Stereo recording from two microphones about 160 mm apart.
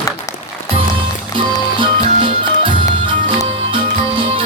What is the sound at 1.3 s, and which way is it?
Music, 30° right (ahead or behind).